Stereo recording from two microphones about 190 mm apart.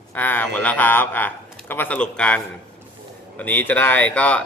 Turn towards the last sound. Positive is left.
turn(degrees=5)  # may be behind; listen again after turning